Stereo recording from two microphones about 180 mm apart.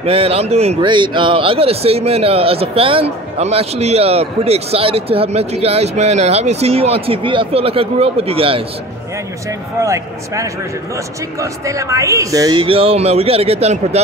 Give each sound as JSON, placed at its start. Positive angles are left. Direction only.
{"t": 0.0, "sound": "speech", "side_deg": -35}
{"t": 0.7, "sound": "speech", "side_deg": -25}
{"t": 9.8, "sound": "speech", "side_deg": -15}